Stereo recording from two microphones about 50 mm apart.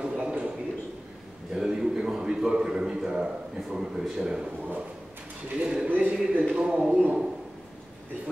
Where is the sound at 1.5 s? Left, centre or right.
Centre.